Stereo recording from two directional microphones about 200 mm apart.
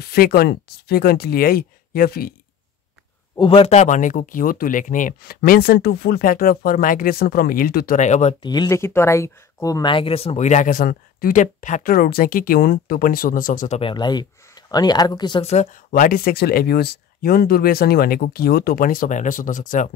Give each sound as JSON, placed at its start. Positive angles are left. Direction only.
{"t": 0.1, "sound": "speech", "side_deg": 50}
{"t": 3.3, "sound": "speech", "side_deg": 25}
{"t": 8.5, "sound": "speech", "side_deg": 15}
{"t": 15.9, "sound": "speech", "side_deg": 45}